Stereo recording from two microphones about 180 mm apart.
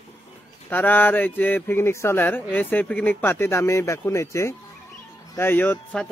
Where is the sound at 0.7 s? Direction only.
10° left (ahead or behind).